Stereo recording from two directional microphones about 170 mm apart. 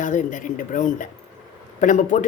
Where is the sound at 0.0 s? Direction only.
50° left (ahead or behind).